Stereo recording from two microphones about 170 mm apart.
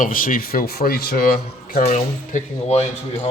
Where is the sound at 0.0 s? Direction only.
50° left (ahead or behind).